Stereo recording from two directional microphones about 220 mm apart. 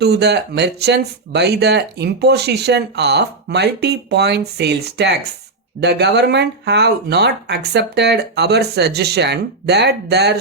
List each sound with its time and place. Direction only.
0.0 s speech: 50° right (ahead or behind)